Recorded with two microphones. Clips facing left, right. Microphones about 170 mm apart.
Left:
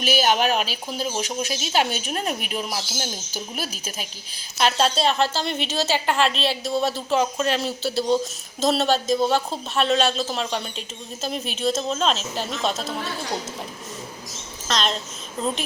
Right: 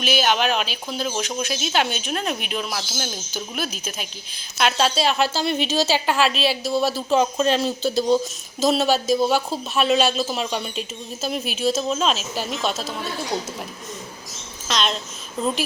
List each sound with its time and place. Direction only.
0.0 s speech: 40° left (ahead or behind)
0.9 s speech: 10° left (ahead or behind)
1.4 s speech: 35° left (ahead or behind)
4.8 s speech: 5° right (ahead or behind)
7.1 s speech: 20° right (ahead or behind)
8.6 s speech: 5° right (ahead or behind)
14.7 s speech: centre (ahead or behind)